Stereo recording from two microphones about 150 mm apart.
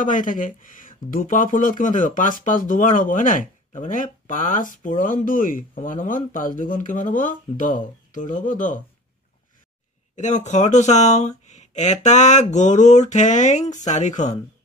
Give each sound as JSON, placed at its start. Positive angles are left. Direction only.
{"t": 0.0, "sound": "speech", "side_deg": 60}
{"t": 10.1, "sound": "speech", "side_deg": 50}